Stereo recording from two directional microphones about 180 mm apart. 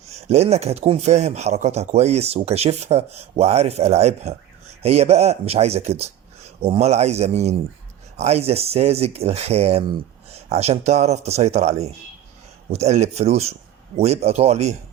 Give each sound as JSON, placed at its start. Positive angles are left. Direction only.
{"t": 0.1, "sound": "speech", "side_deg": -35}